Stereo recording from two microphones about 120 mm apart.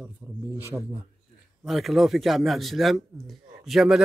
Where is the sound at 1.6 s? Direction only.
Centre (ahead or behind).